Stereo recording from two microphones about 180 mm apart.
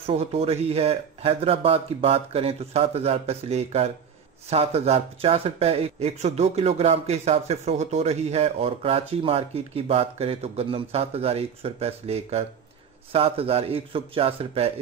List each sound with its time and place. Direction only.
0.0 s speech: 35° right (ahead or behind)